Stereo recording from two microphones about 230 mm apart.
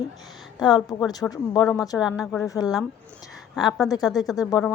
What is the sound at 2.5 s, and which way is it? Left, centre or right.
Speech, centre.